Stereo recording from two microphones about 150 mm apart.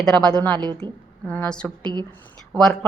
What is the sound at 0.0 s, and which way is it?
A woman's voice, 5° left (ahead or behind).